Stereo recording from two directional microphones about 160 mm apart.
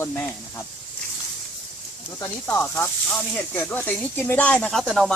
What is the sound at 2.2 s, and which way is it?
Speech, 15° left (ahead or behind).